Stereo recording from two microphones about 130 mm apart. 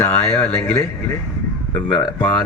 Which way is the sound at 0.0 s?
20° left (ahead or behind).